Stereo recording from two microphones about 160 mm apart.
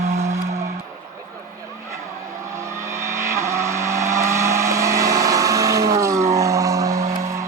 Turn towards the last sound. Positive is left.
turn(degrees=-20)  # may be behind; listen again after turning